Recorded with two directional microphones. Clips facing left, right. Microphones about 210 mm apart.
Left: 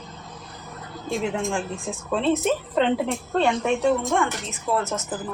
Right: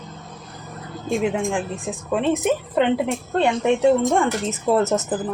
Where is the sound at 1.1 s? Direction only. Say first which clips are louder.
Right 4 dB; 15° right (ahead or behind).